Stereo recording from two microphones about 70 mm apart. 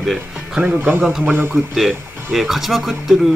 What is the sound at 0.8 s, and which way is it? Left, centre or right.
Speech, right.